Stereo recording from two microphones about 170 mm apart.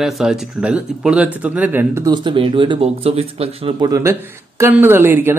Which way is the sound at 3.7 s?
20° right (ahead or behind).